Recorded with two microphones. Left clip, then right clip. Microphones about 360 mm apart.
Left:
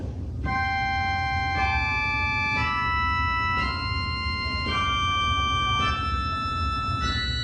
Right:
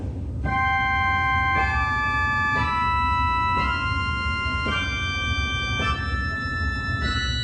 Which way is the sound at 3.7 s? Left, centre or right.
Centre.